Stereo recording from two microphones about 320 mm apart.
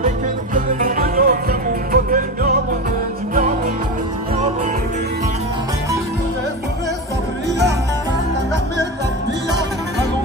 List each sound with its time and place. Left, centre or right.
0.6 s music: right